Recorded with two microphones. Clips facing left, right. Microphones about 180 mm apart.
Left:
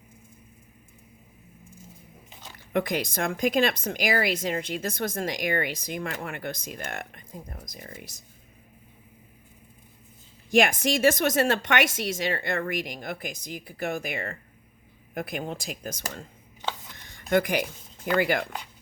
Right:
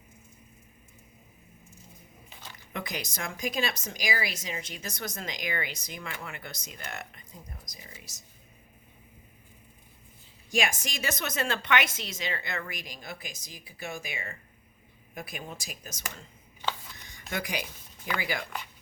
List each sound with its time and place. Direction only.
2.7 s a woman's voice: 55° left (ahead or behind)
10.5 s a woman's voice: 55° left (ahead or behind)
17.2 s a sound: 55° left (ahead or behind)
18.2 s a woman's voice: 55° left (ahead or behind)